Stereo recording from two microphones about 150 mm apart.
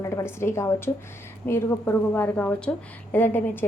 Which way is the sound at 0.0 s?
20° left (ahead or behind).